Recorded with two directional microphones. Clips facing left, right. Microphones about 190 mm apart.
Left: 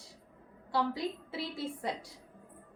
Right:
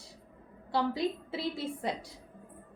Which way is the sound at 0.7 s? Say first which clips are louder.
Right 2 dB; 25° right (ahead or behind).